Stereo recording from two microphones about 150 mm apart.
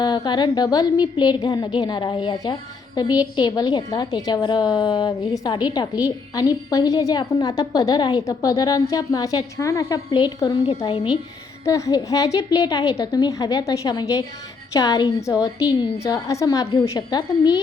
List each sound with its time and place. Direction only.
0.0 s a woman's voice: 30° left (ahead or behind)
11.6 s a woman's voice: 20° left (ahead or behind)